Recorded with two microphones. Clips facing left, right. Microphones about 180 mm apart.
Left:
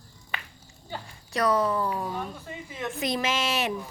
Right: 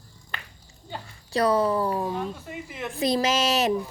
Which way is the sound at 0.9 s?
30° right (ahead or behind).